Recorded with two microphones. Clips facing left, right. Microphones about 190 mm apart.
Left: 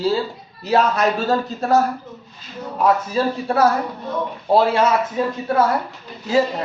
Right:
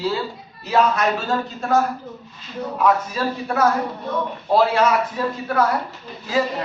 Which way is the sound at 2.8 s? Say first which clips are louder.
Left 2 dB; 30° left (ahead or behind).